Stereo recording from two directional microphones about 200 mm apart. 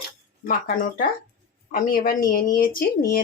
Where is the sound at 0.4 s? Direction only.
45° left (ahead or behind).